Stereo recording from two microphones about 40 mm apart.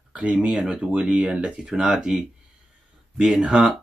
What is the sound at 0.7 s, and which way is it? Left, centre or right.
Speech, right.